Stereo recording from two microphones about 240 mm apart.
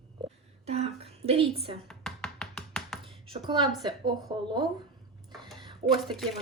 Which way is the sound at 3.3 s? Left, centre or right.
Centre.